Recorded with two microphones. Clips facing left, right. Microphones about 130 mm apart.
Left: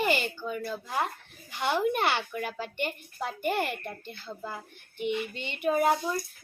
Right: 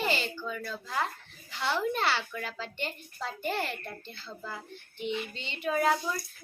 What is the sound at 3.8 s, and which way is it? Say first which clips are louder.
Speech: left 3 dB; 15° left (ahead or behind).